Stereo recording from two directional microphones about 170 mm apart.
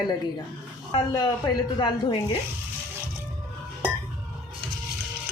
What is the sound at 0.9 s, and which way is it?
A woman's voice, 25° left (ahead or behind).